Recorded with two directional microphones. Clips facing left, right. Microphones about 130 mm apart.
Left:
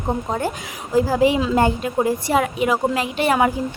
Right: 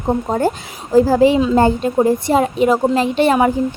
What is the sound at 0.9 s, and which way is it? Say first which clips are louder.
A woman's voice: right 5 dB; 35° right (ahead or behind).